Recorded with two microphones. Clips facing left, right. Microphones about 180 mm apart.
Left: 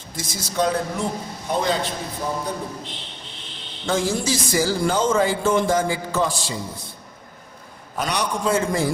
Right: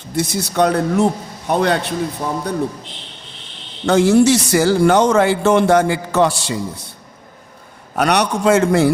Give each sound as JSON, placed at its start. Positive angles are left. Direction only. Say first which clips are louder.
{"t": 0.2, "sound": "speech", "louder": "right 7 dB", "side_deg": -65}
{"t": 3.8, "sound": "speech", "louder": "right 11 dB", "side_deg": -70}
{"t": 7.9, "sound": "speech", "louder": "right 8 dB", "side_deg": -70}